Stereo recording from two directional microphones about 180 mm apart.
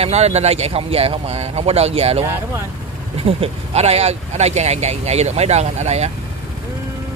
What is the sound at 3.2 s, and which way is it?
Speech, 30° right (ahead or behind).